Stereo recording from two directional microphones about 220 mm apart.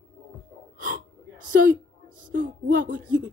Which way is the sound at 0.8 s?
40° right (ahead or behind).